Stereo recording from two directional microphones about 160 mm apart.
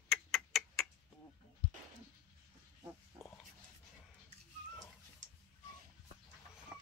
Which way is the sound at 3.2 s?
15° right (ahead or behind).